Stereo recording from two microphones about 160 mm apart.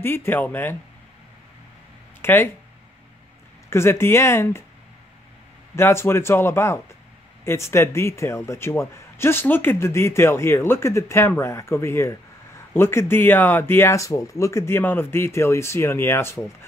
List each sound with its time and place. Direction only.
0.0 s a man's voice: 15° left (ahead or behind)
2.2 s a man's voice: 15° left (ahead or behind)
3.7 s a man's voice: 15° left (ahead or behind)
5.8 s a man's voice: 15° left (ahead or behind)